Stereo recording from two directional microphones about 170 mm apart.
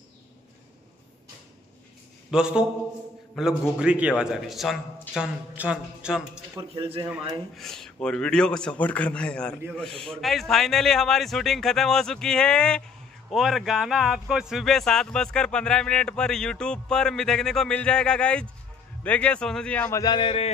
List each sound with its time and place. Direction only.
2.3 s speech: 5° right (ahead or behind)
6.5 s speech: 30° right (ahead or behind)
7.5 s a man's voice: centre (ahead or behind)
19.9 s a sound: 25° left (ahead or behind)